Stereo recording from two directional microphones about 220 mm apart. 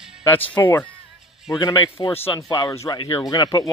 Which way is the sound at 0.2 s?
10° left (ahead or behind).